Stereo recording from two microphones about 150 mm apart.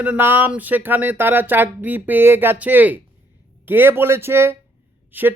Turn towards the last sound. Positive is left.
turn(degrees=-10)  # may be behind; listen again after turning